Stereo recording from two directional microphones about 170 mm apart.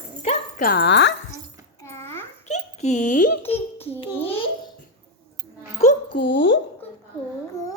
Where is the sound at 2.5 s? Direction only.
45° left (ahead or behind).